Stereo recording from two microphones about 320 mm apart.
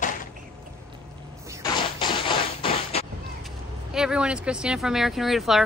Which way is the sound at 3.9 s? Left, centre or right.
Centre.